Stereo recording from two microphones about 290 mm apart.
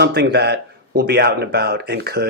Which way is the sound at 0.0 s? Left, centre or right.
Right.